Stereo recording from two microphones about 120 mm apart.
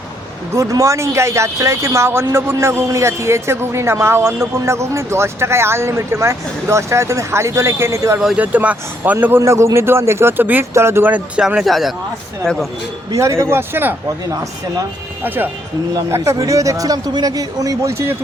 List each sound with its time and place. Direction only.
0.5 s a man's voice: 25° right (ahead or behind)
8.4 s a man's voice: 15° right (ahead or behind)
13.1 s a man's voice: 25° right (ahead or behind)
14.3 s speech: 30° right (ahead or behind)
16.0 s a man's voice: 25° right (ahead or behind)